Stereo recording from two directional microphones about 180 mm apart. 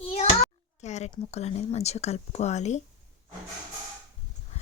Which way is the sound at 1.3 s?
35° left (ahead or behind).